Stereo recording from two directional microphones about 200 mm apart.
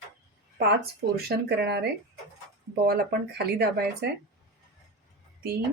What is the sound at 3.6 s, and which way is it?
Speech, 55° right (ahead or behind).